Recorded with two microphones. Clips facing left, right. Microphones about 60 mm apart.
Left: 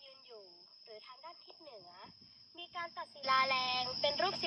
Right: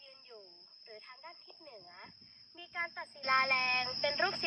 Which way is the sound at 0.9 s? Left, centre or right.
Right.